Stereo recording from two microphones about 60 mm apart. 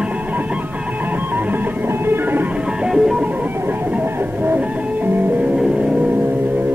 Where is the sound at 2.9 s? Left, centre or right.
Centre.